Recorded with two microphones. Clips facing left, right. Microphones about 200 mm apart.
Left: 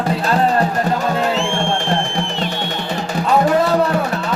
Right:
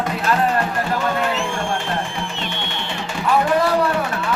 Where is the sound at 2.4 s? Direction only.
40° left (ahead or behind).